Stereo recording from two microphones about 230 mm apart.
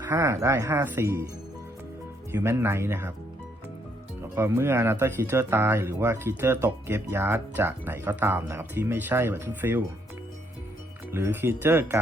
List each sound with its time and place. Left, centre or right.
0.0 s speech: centre
2.3 s speech: centre
4.2 s speech: centre
11.1 s speech: centre